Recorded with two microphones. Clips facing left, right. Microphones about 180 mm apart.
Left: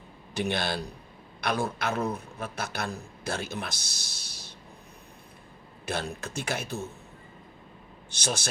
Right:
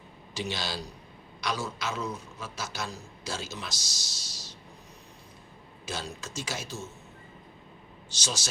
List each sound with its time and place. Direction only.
0.3 s a man's voice: 55° left (ahead or behind)
5.8 s a man's voice: 60° left (ahead or behind)
8.1 s a man's voice: 60° left (ahead or behind)